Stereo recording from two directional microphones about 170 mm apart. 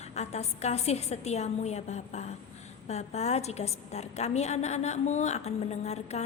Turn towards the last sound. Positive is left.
turn(degrees=40)  # may be behind; listen again after turning